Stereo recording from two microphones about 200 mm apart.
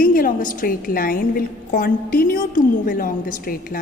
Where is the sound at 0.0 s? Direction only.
45° left (ahead or behind).